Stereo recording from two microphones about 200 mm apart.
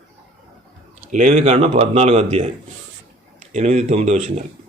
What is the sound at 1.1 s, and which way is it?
Speech, 40° right (ahead or behind).